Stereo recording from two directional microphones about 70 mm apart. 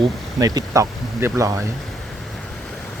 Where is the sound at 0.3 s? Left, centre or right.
Right.